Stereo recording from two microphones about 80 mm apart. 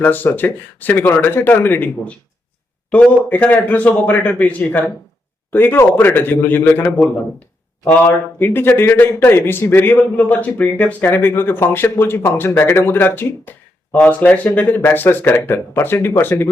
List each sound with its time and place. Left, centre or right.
0.0 s speech: left
3.2 s speech: left